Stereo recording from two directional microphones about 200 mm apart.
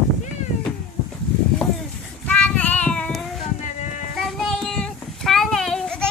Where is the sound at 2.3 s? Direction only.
5° left (ahead or behind).